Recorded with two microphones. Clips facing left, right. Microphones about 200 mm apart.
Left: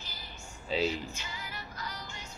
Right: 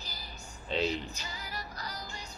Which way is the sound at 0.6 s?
5° left (ahead or behind).